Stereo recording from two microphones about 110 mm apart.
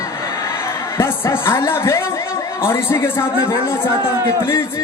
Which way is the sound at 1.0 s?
25° left (ahead or behind).